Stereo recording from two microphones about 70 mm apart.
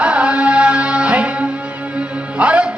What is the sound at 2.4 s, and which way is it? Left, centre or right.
Music, centre.